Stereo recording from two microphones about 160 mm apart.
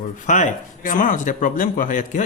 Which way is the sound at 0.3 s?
55° left (ahead or behind).